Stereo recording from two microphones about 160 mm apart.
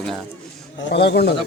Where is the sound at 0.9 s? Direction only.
90° left.